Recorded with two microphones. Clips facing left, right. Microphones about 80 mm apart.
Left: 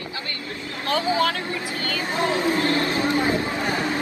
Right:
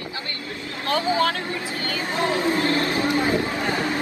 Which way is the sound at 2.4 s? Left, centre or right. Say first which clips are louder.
Even; right.